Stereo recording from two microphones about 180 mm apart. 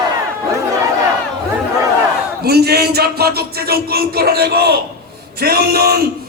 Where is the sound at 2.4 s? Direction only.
60° right (ahead or behind).